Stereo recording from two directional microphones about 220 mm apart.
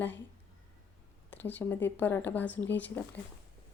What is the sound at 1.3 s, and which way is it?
Speech, 10° left (ahead or behind).